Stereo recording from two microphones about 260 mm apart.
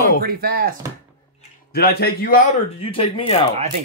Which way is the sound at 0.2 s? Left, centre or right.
Right.